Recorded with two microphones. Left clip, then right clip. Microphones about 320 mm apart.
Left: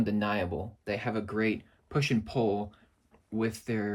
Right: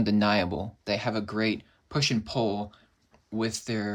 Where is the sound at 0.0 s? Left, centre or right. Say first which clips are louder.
Right 5 dB; right.